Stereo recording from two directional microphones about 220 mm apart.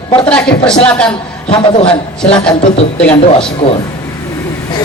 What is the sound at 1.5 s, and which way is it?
Speech, 25° left (ahead or behind).